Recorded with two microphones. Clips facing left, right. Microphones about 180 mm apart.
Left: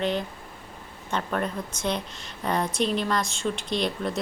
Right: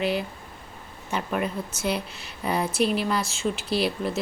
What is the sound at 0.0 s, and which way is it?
Speech, 10° right (ahead or behind).